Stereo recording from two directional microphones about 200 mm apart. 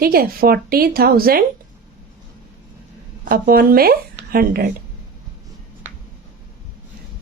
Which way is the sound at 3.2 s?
45° right (ahead or behind).